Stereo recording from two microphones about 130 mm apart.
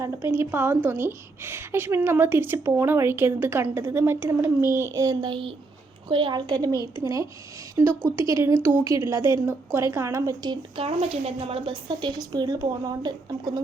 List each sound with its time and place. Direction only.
0.3 s a woman's voice: 15° right (ahead or behind)
5.2 s a woman's voice: 40° right (ahead or behind)
10.8 s a woman's voice: 50° right (ahead or behind); by 13.6 s 35° right (ahead or behind)